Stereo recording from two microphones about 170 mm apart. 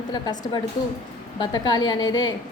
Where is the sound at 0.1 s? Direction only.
25° left (ahead or behind).